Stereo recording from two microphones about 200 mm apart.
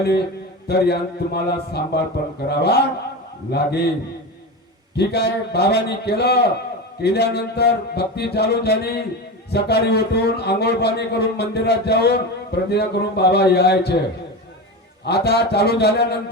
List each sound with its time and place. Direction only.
0.7 s a man's voice: 55° left (ahead or behind)
4.9 s a man's voice: 55° left (ahead or behind)
15.0 s speech: 55° left (ahead or behind)